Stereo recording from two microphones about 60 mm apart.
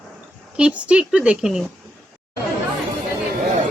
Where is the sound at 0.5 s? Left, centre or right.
Centre.